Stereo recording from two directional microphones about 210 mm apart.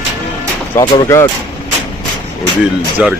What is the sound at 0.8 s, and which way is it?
Speech, 20° left (ahead or behind).